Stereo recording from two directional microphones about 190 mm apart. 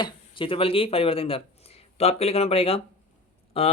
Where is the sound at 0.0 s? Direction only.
25° left (ahead or behind).